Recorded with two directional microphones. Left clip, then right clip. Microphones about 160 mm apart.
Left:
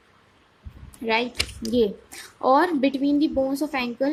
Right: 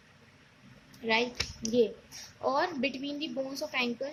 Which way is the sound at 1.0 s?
50° left (ahead or behind).